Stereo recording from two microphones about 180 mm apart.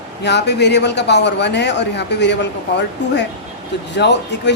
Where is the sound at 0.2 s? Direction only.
70° left (ahead or behind).